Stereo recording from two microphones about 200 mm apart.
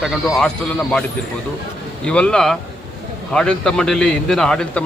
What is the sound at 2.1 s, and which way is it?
Speech, 5° left (ahead or behind).